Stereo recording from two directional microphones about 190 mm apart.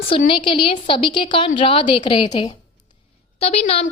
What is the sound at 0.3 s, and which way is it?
A woman's voice, 25° left (ahead or behind).